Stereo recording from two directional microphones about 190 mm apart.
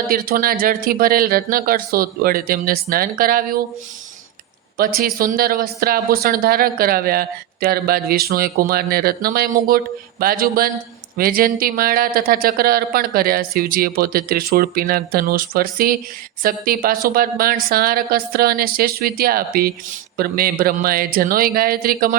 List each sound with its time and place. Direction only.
0.1 s speech: 50° right (ahead or behind)
4.8 s speech: 50° right (ahead or behind)